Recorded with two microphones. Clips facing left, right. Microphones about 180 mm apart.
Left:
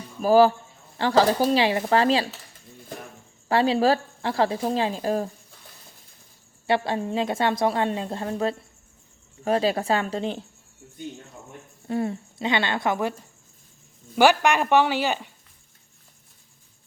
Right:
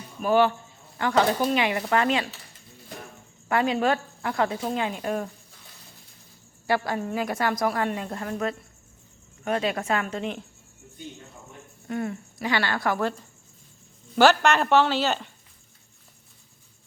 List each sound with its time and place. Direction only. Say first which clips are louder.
0.2 s speech: left 4 dB; 35° left (ahead or behind)
3.5 s speech: left 3 dB; 30° left (ahead or behind)
6.7 s a woman's voice: left 2 dB; 25° left (ahead or behind)
11.9 s a woman's voice: left 3 dB; 30° left (ahead or behind)
14.2 s a man's voice: even; 10° left (ahead or behind)